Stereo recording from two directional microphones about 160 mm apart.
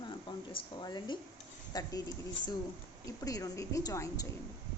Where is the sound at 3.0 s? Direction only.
20° left (ahead or behind).